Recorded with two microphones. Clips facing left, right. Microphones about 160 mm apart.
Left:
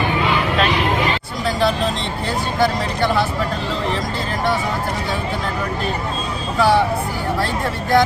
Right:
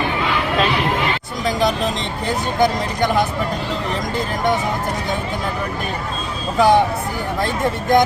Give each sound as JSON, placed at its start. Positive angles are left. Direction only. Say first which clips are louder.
{"t": 1.5, "sound": "vehicle", "louder": "even", "side_deg": -15}
{"t": 2.2, "sound": "speech", "louder": "right 1 dB", "side_deg": -15}
{"t": 6.6, "sound": "speech", "louder": "right 2 dB", "side_deg": -15}